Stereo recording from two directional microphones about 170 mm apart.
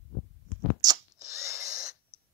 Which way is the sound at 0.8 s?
20° right (ahead or behind).